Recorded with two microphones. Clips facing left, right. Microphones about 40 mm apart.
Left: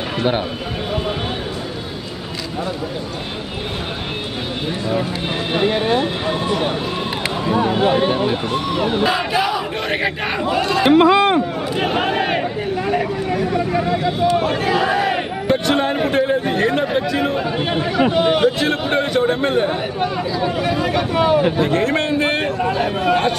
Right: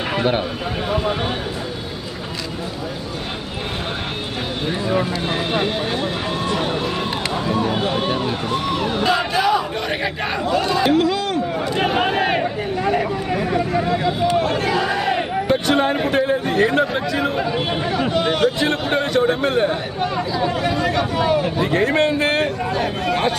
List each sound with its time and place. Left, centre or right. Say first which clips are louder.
5.3 s speech: left 3 dB; centre
6.4 s run: even; centre
7.2 s a sound: left 3 dB; centre
7.8 s speech: left 5 dB; left
10.9 s speech: left 6 dB; left
11.5 s a sound: even; centre
13.7 s a man's voice: left 1 dB; centre
14.3 s a man's voice: left 1 dB; centre
17.9 s a man's voice: left 5 dB; centre
21.5 s a man's voice: even; centre